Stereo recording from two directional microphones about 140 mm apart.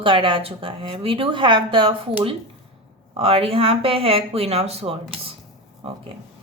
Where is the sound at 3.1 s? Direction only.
45° right (ahead or behind).